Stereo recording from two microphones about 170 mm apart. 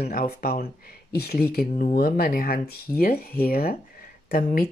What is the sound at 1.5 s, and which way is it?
Speech, 55° left (ahead or behind).